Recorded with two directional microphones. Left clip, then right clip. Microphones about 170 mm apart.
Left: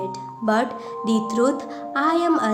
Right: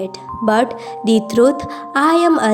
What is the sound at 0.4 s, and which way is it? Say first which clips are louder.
A woman's voice: right 6 dB; 45° right (ahead or behind).